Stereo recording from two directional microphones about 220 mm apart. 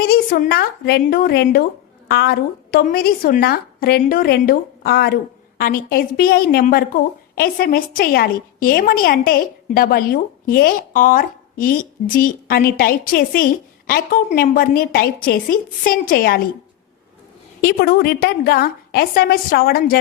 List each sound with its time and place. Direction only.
0.1 s a woman's voice: 40° left (ahead or behind)
17.6 s a woman's voice: 45° left (ahead or behind)